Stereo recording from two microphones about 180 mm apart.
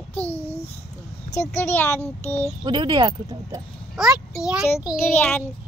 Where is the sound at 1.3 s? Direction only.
15° left (ahead or behind).